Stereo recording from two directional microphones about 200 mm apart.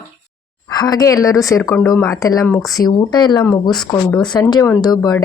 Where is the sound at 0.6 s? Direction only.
20° left (ahead or behind).